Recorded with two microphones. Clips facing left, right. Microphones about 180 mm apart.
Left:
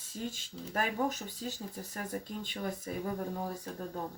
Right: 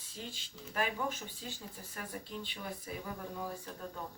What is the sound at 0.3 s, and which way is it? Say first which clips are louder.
Speech: left 7 dB; 40° left (ahead or behind).